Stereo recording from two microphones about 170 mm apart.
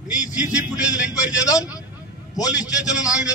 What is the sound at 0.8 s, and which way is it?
Speech, 20° left (ahead or behind).